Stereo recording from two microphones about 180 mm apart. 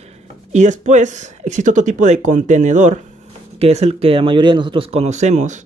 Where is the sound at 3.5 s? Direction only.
35° right (ahead or behind).